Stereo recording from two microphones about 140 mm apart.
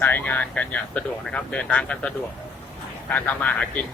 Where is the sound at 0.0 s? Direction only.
15° left (ahead or behind).